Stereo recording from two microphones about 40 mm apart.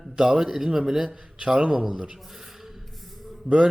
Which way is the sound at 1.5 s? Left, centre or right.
Right.